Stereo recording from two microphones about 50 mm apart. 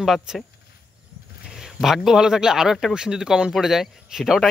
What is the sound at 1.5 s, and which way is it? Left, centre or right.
Speech, centre.